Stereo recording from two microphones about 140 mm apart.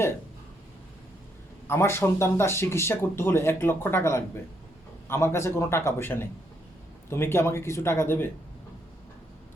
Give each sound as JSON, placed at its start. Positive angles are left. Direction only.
{"t": 1.6, "sound": "speech", "side_deg": 15}